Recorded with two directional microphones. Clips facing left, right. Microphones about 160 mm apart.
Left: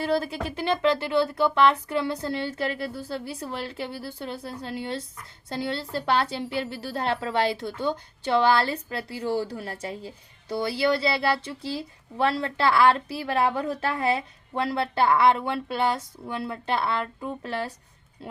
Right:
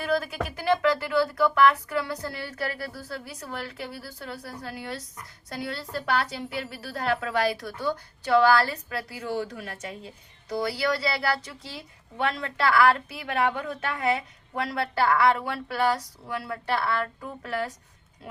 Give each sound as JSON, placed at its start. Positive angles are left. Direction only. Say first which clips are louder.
{"t": 0.0, "sound": "a woman's voice", "louder": "left 1 dB", "side_deg": 30}